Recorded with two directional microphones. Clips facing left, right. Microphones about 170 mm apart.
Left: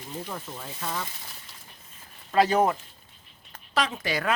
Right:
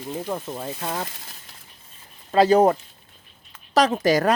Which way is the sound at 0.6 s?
40° right (ahead or behind).